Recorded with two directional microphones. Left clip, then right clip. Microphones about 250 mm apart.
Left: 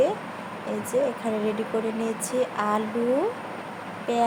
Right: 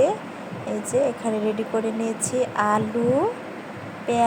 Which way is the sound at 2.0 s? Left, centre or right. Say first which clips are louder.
Right 2 dB; centre.